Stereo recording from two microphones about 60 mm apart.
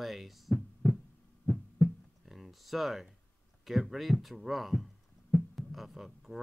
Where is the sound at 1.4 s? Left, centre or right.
Left.